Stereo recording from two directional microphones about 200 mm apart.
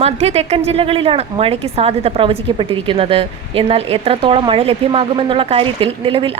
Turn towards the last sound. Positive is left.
turn(degrees=-25)  # may be behind; listen again after turning